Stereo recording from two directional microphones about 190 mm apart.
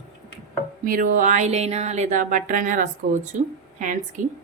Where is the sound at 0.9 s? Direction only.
45° right (ahead or behind).